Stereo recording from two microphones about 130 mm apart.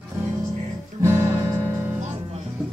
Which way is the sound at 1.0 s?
20° right (ahead or behind).